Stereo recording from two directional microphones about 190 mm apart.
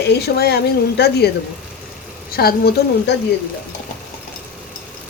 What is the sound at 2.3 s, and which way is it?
Speech, 55° left (ahead or behind).